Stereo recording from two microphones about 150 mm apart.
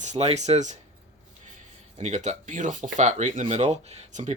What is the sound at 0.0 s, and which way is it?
Speech, 45° right (ahead or behind).